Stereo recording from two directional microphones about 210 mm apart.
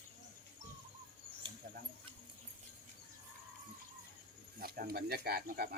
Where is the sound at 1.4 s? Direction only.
25° right (ahead or behind).